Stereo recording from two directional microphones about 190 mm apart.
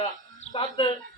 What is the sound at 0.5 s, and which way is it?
Speech, 25° left (ahead or behind).